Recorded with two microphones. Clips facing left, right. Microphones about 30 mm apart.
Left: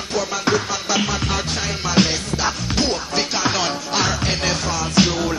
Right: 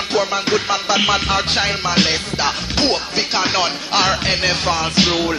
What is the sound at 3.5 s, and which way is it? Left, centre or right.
Music, right.